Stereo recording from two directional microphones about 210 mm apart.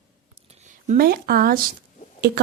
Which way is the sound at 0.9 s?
45° right (ahead or behind).